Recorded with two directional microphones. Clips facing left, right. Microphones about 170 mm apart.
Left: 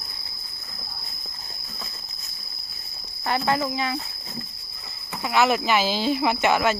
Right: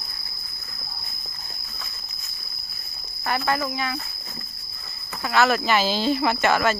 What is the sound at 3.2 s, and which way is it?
Speech, 25° left (ahead or behind).